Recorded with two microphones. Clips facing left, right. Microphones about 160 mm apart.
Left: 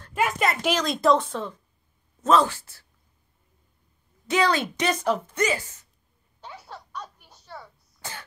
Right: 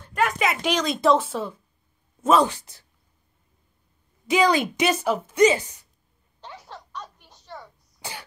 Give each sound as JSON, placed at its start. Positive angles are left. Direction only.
{"t": 0.1, "sound": "a woman's voice", "side_deg": 0}
{"t": 4.3, "sound": "a woman's voice", "side_deg": -10}
{"t": 5.4, "sound": "a woman's voice", "side_deg": -20}
{"t": 6.4, "sound": "a sound", "side_deg": 10}
{"t": 8.0, "sound": "cough", "side_deg": -15}